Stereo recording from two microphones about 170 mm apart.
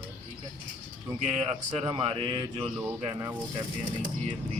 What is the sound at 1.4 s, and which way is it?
Speech, 35° right (ahead or behind).